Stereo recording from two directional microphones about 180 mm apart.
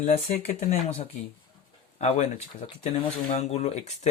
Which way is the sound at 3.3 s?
40° left (ahead or behind).